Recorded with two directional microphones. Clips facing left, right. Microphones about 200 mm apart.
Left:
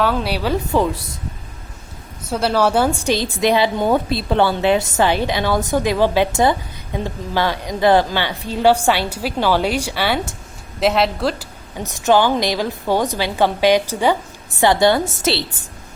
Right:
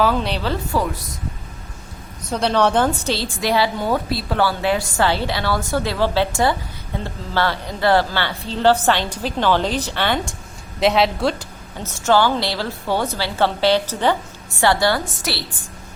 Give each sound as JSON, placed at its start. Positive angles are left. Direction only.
{"t": 0.0, "sound": "a woman's voice", "side_deg": 5}
{"t": 2.3, "sound": "a woman's voice", "side_deg": 5}
{"t": 11.8, "sound": "a woman's voice", "side_deg": 15}